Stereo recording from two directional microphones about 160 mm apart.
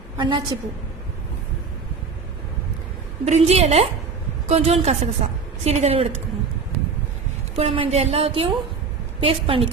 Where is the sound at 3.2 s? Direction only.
40° right (ahead or behind).